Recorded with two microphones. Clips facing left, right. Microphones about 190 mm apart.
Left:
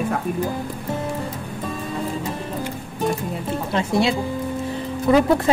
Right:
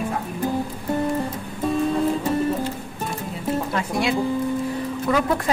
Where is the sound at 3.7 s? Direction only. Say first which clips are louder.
Left 6 dB; 25° left (ahead or behind).